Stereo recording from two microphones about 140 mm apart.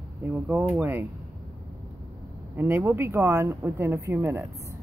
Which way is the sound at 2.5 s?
15° right (ahead or behind).